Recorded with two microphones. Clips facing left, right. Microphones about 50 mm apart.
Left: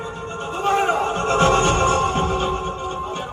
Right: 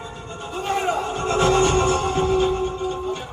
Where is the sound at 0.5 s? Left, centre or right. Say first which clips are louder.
Left 4 dB; left.